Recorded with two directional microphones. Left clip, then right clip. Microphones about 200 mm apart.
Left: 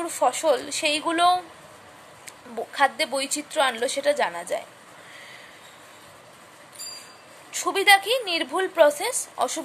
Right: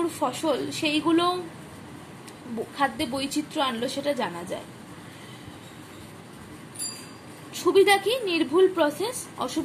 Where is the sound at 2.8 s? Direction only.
30° left (ahead or behind).